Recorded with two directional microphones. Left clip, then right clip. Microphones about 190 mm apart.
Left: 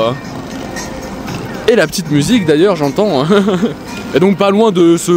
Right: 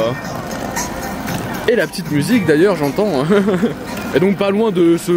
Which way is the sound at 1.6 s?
40° left (ahead or behind).